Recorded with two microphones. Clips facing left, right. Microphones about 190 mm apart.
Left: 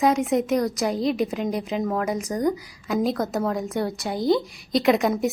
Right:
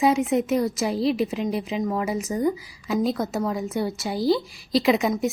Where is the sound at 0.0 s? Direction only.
Centre (ahead or behind).